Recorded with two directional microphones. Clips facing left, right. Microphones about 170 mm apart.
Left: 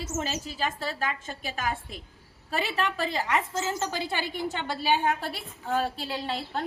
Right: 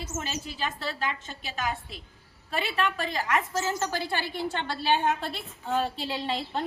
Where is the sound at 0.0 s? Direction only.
40° left (ahead or behind).